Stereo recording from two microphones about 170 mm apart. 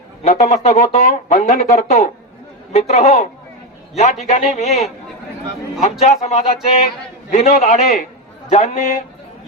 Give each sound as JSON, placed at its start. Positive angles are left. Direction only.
{"t": 0.2, "sound": "a man's voice", "side_deg": 40}
{"t": 5.8, "sound": "speech", "side_deg": 40}